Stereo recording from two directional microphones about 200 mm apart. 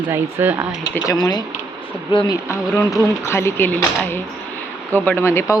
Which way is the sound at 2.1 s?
20° left (ahead or behind).